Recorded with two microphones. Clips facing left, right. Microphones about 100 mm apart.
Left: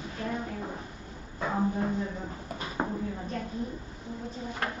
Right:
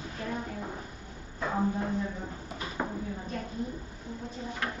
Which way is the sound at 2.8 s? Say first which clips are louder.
Left 3 dB; 25° left (ahead or behind).